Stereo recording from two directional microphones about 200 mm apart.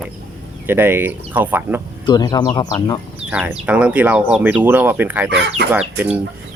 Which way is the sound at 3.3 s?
5° right (ahead or behind).